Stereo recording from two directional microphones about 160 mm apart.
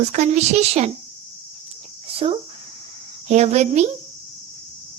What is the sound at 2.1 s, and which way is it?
Speech, 35° right (ahead or behind).